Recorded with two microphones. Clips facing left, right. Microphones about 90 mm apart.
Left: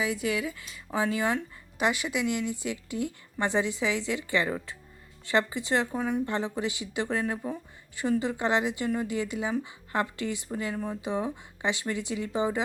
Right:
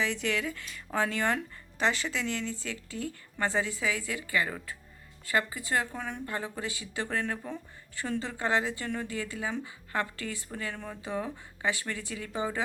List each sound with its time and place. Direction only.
0.0 s a woman's voice: 10° left (ahead or behind)